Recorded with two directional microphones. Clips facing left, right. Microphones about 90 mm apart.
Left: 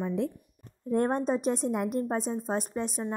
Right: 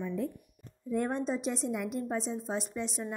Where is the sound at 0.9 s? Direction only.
50° left (ahead or behind).